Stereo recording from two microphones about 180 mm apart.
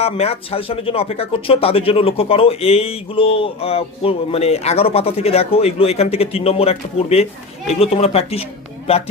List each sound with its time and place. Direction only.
0.0 s speech: 35° left (ahead or behind)